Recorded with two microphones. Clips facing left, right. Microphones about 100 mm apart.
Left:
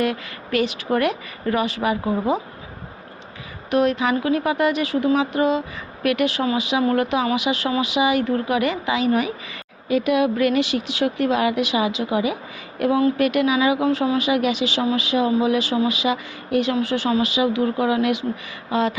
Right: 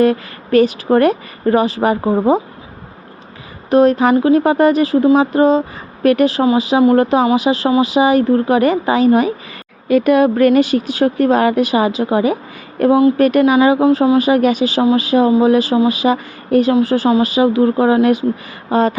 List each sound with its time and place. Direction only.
0.0 s speech: 40° right (ahead or behind)
3.7 s speech: 35° right (ahead or behind)
9.9 s speech: 50° right (ahead or behind)